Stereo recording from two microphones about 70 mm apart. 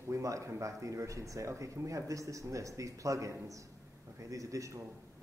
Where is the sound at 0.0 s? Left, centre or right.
Right.